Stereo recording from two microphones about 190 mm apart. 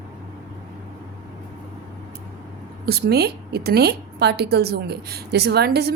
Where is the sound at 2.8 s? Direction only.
55° right (ahead or behind).